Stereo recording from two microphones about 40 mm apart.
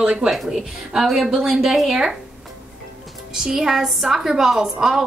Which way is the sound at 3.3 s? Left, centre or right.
Centre.